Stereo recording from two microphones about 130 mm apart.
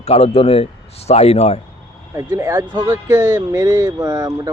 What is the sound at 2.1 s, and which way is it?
Speech, 20° right (ahead or behind).